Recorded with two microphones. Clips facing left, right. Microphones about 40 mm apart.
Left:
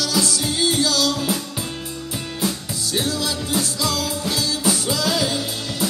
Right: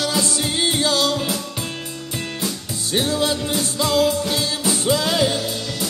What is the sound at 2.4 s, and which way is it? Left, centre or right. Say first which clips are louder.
Music: left 4 dB; centre.